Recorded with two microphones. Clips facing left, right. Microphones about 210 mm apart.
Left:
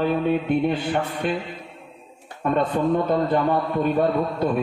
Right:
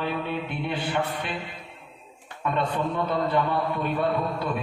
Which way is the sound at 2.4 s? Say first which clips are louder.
Left 6 dB; 45° left (ahead or behind).